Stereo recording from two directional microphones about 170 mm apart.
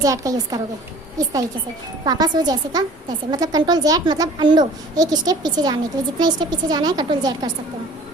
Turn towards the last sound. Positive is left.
turn(degrees=-25)  # may be behind; listen again after turning